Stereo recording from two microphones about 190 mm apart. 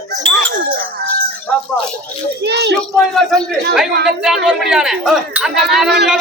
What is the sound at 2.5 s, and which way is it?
Speech, 60° right (ahead or behind).